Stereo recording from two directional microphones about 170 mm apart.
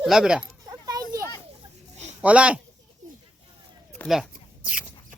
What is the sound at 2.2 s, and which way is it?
Speech, 10° right (ahead or behind).